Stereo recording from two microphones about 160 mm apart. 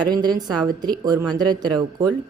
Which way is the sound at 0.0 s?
25° right (ahead or behind).